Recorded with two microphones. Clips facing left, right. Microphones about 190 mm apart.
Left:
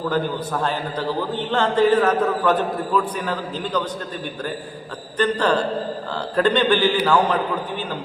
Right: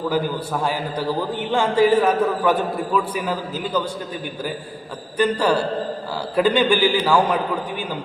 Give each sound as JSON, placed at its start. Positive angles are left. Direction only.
{"t": 0.1, "sound": "a man's voice", "side_deg": -10}
{"t": 5.1, "sound": "a man's voice", "side_deg": -10}